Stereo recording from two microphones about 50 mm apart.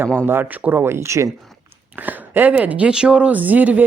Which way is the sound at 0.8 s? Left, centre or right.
Right.